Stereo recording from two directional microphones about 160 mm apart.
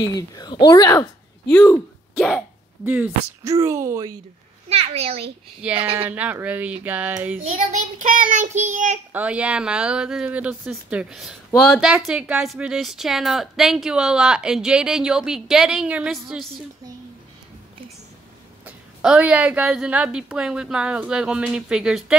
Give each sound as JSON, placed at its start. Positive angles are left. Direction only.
{"t": 0.0, "sound": "speech", "side_deg": 25}
{"t": 1.5, "sound": "speech", "side_deg": 5}
{"t": 2.8, "sound": "speech", "side_deg": -10}
{"t": 4.6, "sound": "a child's voice", "side_deg": -40}
{"t": 6.0, "sound": "speech", "side_deg": -10}
{"t": 7.5, "sound": "child singing", "side_deg": -50}
{"t": 9.1, "sound": "speech", "side_deg": -10}
{"t": 18.7, "sound": "speech", "side_deg": -5}